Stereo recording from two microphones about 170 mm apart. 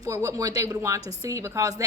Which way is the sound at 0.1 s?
15° right (ahead or behind).